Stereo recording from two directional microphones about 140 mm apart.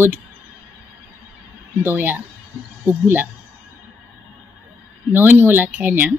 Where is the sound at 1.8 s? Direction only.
15° right (ahead or behind).